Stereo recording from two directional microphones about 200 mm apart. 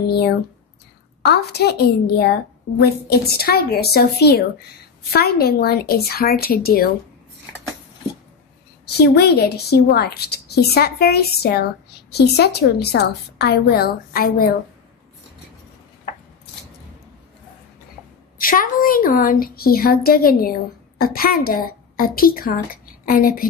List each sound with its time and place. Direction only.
1.3 s a woman's voice: 55° left (ahead or behind)
8.8 s a woman's voice: 55° left (ahead or behind)
18.4 s a woman's voice: 45° left (ahead or behind)